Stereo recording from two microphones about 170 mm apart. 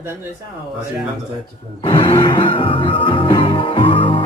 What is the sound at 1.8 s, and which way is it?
Music, 30° left (ahead or behind).